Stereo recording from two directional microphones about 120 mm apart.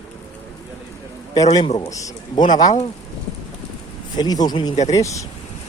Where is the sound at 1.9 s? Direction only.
25° left (ahead or behind).